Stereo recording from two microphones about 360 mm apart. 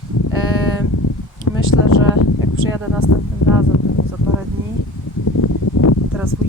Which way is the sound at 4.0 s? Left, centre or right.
Left.